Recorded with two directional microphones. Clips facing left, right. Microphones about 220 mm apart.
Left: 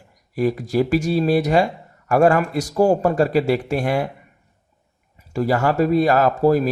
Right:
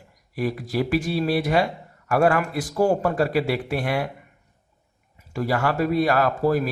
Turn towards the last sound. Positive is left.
turn(degrees=40)  # may be behind; listen again after turning